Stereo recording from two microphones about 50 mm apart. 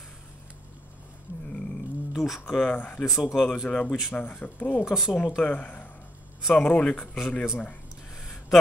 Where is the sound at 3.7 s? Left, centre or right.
Left.